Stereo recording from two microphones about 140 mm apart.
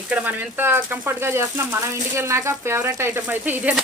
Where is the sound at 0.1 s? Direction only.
10° right (ahead or behind).